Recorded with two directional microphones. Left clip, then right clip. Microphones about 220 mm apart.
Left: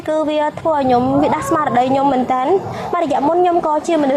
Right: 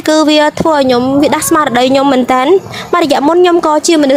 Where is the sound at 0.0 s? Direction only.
60° right (ahead or behind).